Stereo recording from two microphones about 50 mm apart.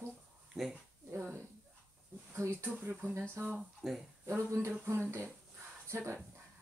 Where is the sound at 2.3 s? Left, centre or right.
Right.